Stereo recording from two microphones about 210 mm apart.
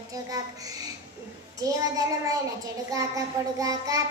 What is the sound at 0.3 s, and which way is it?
A child's voice, 15° right (ahead or behind).